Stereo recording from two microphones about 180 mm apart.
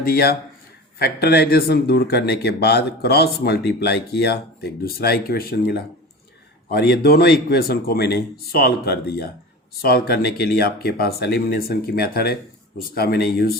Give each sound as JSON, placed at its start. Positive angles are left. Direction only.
{"t": 0.0, "sound": "speech", "side_deg": 55}